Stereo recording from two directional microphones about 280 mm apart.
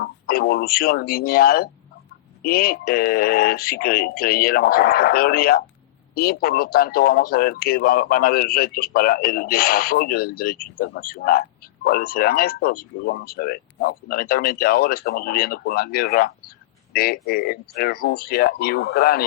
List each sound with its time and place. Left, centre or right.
0.0 s speech: left